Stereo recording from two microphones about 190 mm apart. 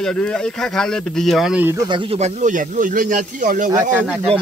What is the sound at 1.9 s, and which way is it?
Speech, 30° right (ahead or behind).